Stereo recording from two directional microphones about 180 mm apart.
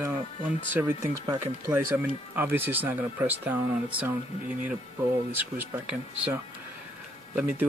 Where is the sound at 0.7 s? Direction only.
15° right (ahead or behind).